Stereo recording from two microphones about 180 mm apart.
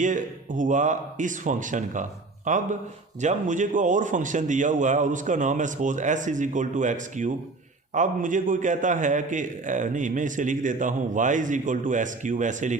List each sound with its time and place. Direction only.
0.0 s a man's voice: 45° right (ahead or behind)